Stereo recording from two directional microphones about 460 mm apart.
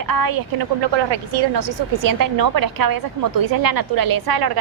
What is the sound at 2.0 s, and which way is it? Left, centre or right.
Speech, right.